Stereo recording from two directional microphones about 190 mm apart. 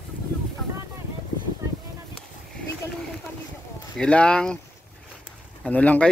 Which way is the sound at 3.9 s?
5° left (ahead or behind).